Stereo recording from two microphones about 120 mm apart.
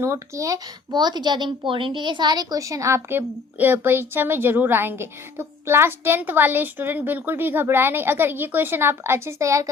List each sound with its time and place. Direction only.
0.0 s speech: 25° right (ahead or behind)